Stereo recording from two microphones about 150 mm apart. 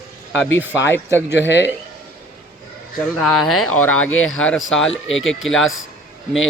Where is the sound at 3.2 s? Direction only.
Centre (ahead or behind).